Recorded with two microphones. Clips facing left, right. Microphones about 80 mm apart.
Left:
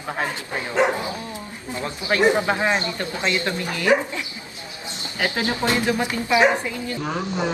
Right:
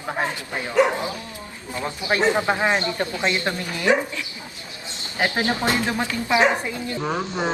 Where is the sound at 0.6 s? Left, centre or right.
Left.